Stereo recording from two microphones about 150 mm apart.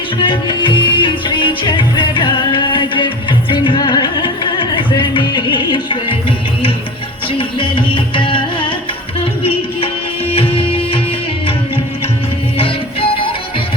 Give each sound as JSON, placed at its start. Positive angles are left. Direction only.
{"t": 0.2, "sound": "music", "side_deg": 35}
{"t": 7.3, "sound": "music", "side_deg": 35}
{"t": 12.5, "sound": "music", "side_deg": 40}